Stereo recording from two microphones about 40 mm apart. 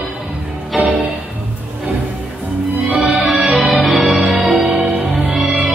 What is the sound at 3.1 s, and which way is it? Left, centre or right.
Music, right.